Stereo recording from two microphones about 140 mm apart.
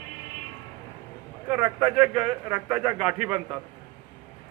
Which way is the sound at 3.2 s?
10° right (ahead or behind).